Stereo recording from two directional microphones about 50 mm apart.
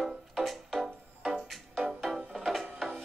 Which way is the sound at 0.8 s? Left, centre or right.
Centre.